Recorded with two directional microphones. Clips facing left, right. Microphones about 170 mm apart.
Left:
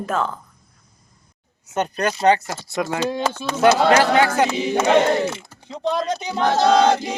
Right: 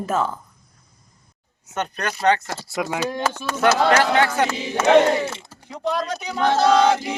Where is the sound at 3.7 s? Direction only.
10° left (ahead or behind).